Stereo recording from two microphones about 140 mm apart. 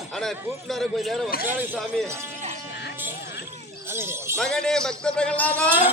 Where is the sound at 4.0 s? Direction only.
15° right (ahead or behind).